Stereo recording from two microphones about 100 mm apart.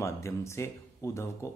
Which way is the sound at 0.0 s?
30° left (ahead or behind).